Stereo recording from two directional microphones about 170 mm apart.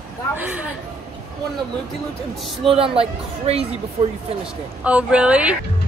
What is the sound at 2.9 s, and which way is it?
Speech, 35° right (ahead or behind).